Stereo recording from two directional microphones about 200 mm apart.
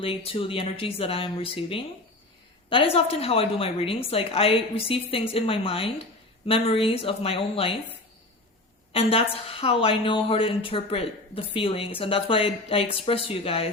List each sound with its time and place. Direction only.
0.0 s a woman's voice: 30° left (ahead or behind)
8.9 s a woman's voice: 30° left (ahead or behind)